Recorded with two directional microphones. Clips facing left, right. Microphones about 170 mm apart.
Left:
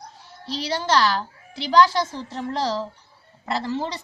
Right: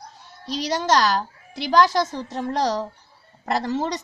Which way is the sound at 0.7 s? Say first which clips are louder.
Right 1 dB; 40° right (ahead or behind).